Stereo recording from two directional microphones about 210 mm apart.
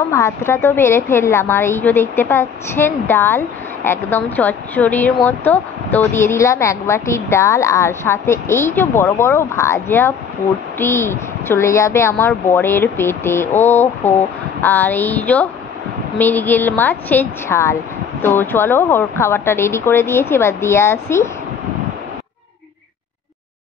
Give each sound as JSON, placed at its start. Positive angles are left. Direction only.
{"t": 0.1, "sound": "a woman's voice", "side_deg": 15}